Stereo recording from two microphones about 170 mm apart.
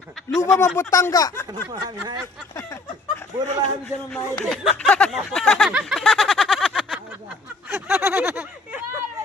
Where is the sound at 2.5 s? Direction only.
20° left (ahead or behind).